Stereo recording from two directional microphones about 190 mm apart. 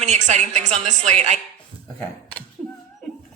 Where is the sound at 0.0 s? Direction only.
35° right (ahead or behind).